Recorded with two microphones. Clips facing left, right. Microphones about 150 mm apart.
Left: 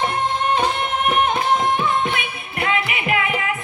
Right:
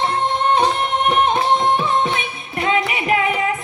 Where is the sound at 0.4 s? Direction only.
35° right (ahead or behind).